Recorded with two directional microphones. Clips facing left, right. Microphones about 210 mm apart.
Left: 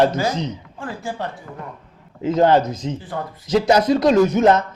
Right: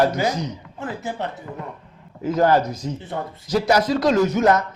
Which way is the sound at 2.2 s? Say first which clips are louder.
Left 2 dB; 20° left (ahead or behind).